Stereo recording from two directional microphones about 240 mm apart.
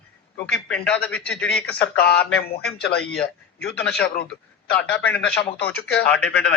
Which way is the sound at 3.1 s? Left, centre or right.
Centre.